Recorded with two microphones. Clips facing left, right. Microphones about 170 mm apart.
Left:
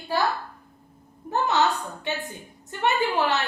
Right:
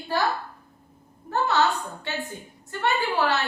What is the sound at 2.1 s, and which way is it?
A woman's voice, 15° left (ahead or behind).